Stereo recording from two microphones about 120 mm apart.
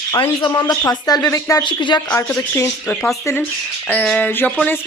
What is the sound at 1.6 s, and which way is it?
Speech, 40° left (ahead or behind).